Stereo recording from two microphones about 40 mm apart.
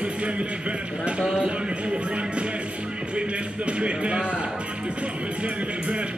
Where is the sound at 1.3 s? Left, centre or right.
Right.